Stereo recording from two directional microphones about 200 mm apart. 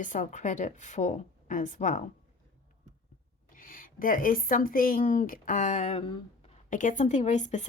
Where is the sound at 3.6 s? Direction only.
45° left (ahead or behind); by 6.2 s 25° left (ahead or behind).